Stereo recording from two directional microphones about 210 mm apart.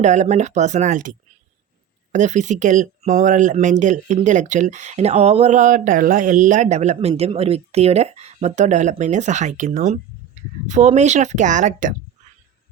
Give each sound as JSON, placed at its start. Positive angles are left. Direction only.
{"t": 0.0, "sound": "speech", "side_deg": -35}
{"t": 2.1, "sound": "speech", "side_deg": -35}